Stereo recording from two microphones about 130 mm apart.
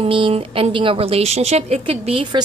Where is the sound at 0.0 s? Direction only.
45° right (ahead or behind).